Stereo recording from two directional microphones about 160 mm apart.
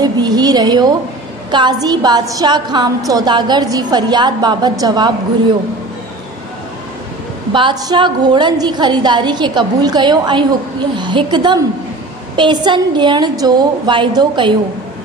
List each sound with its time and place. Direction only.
0.0 s a woman's voice: 25° right (ahead or behind)
7.5 s a woman's voice: 30° right (ahead or behind)